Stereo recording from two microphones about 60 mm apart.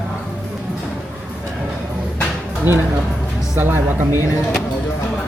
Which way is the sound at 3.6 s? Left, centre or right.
Right.